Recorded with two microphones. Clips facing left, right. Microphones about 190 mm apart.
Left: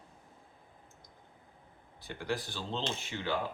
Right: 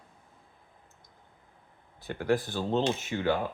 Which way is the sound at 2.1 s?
50° right (ahead or behind).